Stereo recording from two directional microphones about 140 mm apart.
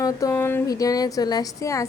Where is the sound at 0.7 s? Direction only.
25° left (ahead or behind).